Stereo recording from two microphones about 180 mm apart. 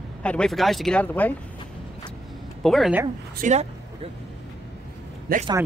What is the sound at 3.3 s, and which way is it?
Speech, 40° right (ahead or behind).